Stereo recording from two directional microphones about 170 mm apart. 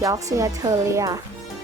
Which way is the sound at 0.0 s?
20° right (ahead or behind).